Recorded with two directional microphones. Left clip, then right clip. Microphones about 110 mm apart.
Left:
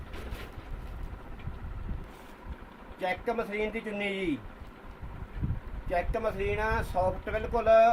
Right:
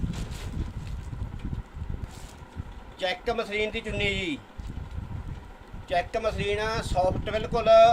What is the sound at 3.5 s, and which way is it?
Speech, 35° right (ahead or behind).